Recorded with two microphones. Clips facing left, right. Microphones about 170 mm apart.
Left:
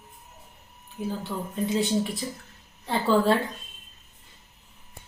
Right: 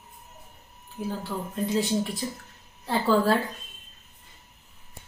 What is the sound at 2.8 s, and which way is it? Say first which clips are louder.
Speech: even; centre (ahead or behind).